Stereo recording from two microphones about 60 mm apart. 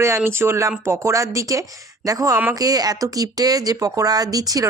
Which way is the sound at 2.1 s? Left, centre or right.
Right.